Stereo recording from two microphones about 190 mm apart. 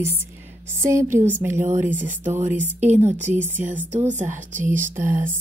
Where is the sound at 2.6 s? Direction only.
35° right (ahead or behind).